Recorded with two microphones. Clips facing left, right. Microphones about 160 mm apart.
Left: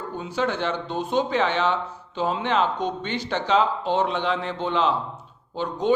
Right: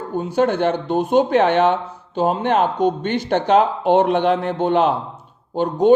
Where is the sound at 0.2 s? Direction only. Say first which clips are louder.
Right 8 dB; 50° right (ahead or behind).